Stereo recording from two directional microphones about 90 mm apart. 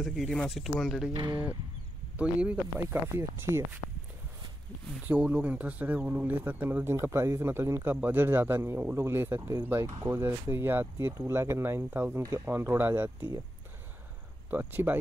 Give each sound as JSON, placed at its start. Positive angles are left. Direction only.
{"t": 0.0, "sound": "speech", "side_deg": 0}
{"t": 1.1, "sound": "speech", "side_deg": -55}
{"t": 2.1, "sound": "speech", "side_deg": -15}
{"t": 3.2, "sound": "speech", "side_deg": -30}
{"t": 5.0, "sound": "speech", "side_deg": -15}
{"t": 12.2, "sound": "speech", "side_deg": -40}
{"t": 12.4, "sound": "speech", "side_deg": -20}
{"t": 14.5, "sound": "speech", "side_deg": -20}